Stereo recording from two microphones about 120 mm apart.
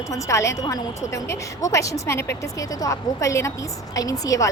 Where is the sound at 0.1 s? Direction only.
25° left (ahead or behind).